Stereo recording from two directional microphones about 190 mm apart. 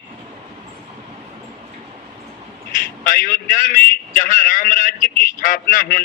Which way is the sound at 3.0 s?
45° left (ahead or behind).